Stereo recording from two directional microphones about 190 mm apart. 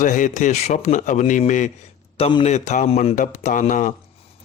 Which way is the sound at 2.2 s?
30° left (ahead or behind).